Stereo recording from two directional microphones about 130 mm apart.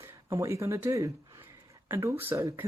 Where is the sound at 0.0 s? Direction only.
25° right (ahead or behind).